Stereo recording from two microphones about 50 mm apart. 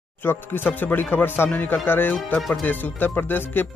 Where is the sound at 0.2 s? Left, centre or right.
Left.